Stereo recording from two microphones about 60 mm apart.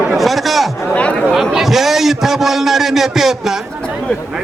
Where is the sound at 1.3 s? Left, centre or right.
Centre.